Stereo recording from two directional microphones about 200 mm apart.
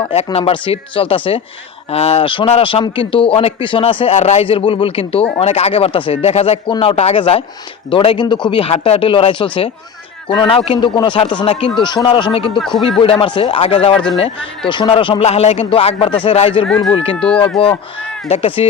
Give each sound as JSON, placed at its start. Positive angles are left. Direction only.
{"t": 0.1, "sound": "a man's voice", "side_deg": 30}
{"t": 12.5, "sound": "speech", "side_deg": 0}
{"t": 13.0, "sound": "a man's voice", "side_deg": 25}
{"t": 16.6, "sound": "speech", "side_deg": 5}
{"t": 16.9, "sound": "a man's voice", "side_deg": 25}
{"t": 17.2, "sound": "speech", "side_deg": 5}
{"t": 18.3, "sound": "a man's voice", "side_deg": 25}